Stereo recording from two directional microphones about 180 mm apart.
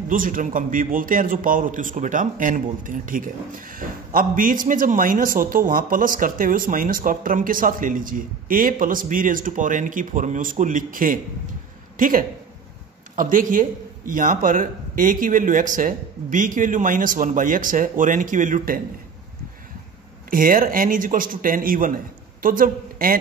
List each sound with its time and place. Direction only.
0.1 s a man's voice: 50° right (ahead or behind)
20.2 s a man's voice: 50° right (ahead or behind)